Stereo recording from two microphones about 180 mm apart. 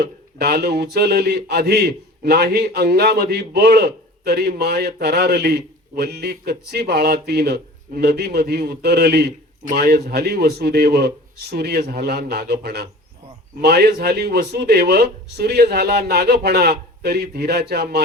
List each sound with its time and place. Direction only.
0.0 s speech: 65° right (ahead or behind)